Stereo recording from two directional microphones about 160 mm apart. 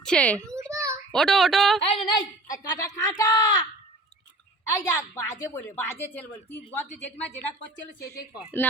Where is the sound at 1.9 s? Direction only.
25° left (ahead or behind).